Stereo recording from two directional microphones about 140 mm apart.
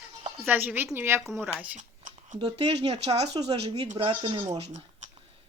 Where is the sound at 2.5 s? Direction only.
45° right (ahead or behind).